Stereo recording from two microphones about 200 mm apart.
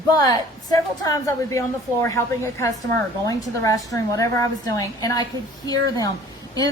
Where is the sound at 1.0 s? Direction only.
15° left (ahead or behind).